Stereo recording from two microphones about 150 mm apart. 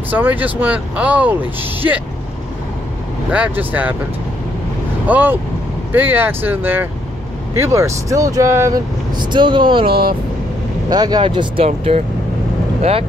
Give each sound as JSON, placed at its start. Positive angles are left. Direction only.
{"t": 0.1, "sound": "speech", "side_deg": -10}
{"t": 3.3, "sound": "speech", "side_deg": -10}
{"t": 5.0, "sound": "speech", "side_deg": -10}
{"t": 9.2, "sound": "speech", "side_deg": -30}
{"t": 9.8, "sound": "speech", "side_deg": -90}
{"t": 10.9, "sound": "speech", "side_deg": -25}